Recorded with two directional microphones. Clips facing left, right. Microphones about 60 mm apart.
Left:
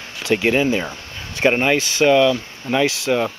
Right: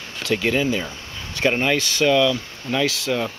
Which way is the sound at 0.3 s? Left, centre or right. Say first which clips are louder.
Left 4 dB; left.